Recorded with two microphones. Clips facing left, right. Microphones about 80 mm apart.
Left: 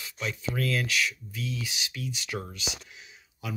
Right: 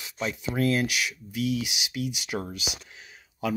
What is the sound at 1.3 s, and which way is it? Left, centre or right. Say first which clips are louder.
Speech: right 8 dB; right.